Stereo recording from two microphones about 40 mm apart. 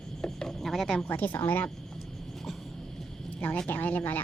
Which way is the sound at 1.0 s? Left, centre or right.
Left.